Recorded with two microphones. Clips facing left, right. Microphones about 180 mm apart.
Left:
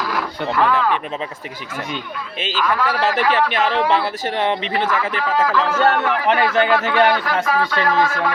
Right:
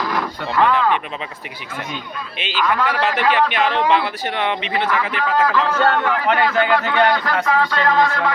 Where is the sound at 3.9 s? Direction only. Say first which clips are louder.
Left 1 dB; 40° left (ahead or behind).